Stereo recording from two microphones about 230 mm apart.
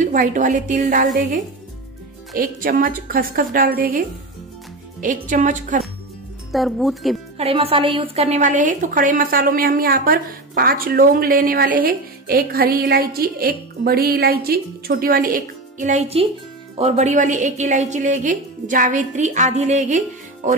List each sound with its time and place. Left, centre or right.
0.0 s a woman's voice: right
5.0 s a woman's voice: right
6.5 s speech: centre
7.3 s a woman's voice: right
20.4 s music: right